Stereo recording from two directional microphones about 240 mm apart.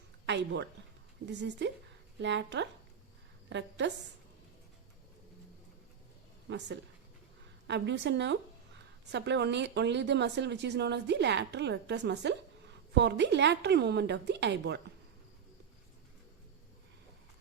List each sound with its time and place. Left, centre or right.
0.3 s speech: right
6.5 s speech: right